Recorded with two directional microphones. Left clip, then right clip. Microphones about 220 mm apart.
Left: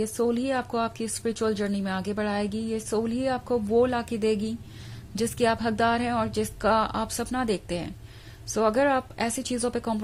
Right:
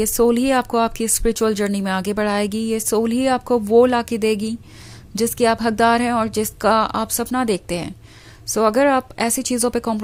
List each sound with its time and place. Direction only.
0.0 s speech: 30° right (ahead or behind)